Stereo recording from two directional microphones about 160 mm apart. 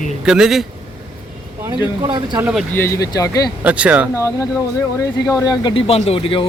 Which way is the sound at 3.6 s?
10° right (ahead or behind).